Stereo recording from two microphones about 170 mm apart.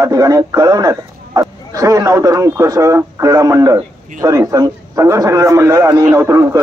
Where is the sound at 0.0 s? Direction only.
20° right (ahead or behind).